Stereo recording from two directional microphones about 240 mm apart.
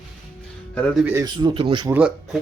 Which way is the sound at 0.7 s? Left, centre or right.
Centre.